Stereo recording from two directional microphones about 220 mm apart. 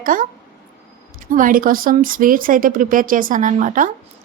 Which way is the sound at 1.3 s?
40° right (ahead or behind).